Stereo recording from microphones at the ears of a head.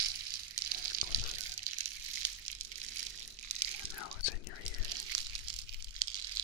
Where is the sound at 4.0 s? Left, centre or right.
Left.